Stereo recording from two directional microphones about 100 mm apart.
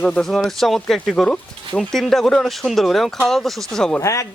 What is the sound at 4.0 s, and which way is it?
Speech, 30° left (ahead or behind).